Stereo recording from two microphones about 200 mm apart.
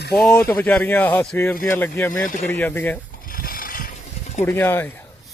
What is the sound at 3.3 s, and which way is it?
Pulleys, 45° left (ahead or behind).